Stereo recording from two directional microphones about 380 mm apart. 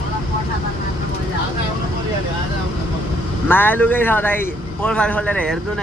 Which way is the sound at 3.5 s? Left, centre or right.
Centre.